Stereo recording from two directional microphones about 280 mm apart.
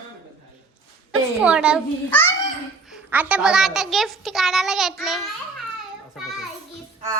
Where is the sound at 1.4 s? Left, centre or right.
Centre.